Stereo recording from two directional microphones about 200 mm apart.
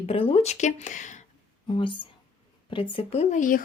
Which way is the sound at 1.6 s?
25° left (ahead or behind).